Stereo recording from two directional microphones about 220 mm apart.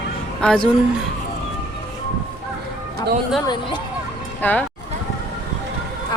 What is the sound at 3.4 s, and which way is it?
Speech, 20° left (ahead or behind).